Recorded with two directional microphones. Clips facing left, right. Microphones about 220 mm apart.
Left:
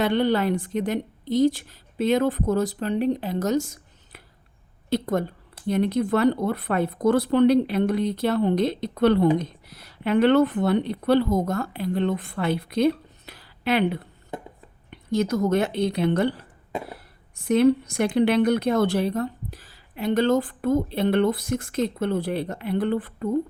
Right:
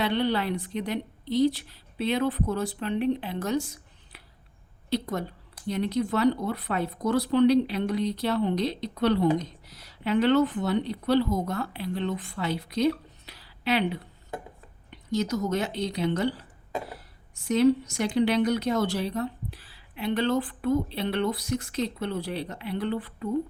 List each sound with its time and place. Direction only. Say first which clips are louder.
0.0 s a woman's voice: left 5 dB; 45° left (ahead or behind)